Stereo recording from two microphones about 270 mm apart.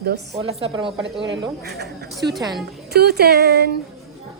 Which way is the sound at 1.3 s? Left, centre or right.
Right.